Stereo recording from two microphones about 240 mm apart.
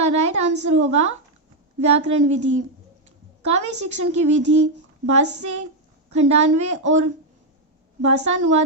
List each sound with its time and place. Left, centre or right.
0.0 s a woman's voice: right